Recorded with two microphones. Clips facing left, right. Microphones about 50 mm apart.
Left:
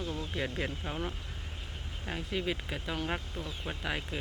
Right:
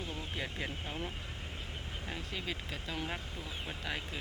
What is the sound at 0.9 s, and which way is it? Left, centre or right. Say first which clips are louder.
Speech: left 3 dB; left.